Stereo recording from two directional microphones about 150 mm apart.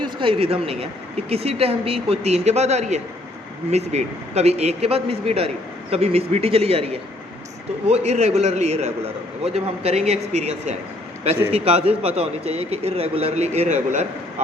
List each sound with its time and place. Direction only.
0.0 s a man's voice: 35° right (ahead or behind)